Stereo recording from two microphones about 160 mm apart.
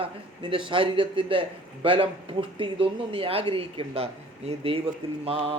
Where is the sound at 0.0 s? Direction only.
30° right (ahead or behind).